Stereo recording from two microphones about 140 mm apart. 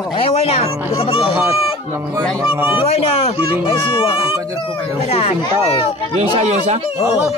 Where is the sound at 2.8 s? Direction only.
45° left (ahead or behind).